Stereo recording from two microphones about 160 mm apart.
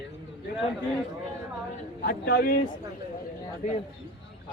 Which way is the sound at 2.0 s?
70° left (ahead or behind).